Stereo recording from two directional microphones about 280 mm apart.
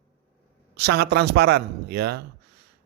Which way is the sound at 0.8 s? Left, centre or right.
Right.